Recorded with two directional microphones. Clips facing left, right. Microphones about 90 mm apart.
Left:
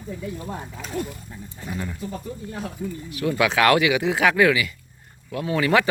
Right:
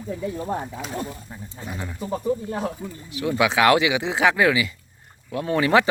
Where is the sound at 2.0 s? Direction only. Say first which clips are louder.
Right 7 dB; 60° right (ahead or behind).